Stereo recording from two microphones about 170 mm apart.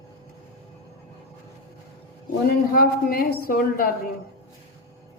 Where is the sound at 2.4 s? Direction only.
55° left (ahead or behind).